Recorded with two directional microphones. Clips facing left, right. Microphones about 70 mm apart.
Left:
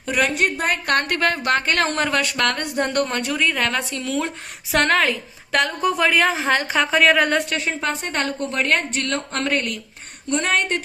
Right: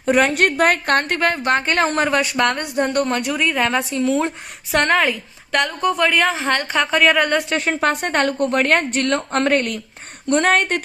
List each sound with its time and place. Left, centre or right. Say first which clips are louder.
0.0 s speech: right 5 dB; right
0.3 s a woman's voice: right 5 dB; right
0.9 s speech: right 2 dB; right
1.9 s a woman's voice: right 3 dB; centre
3.7 s a woman's voice: right 6 dB; centre
4.7 s a woman's voice: right 1 dB; centre
7.6 s a woman's voice: right 5 dB; right